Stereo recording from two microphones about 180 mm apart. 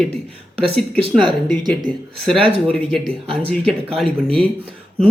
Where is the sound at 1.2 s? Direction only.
25° right (ahead or behind).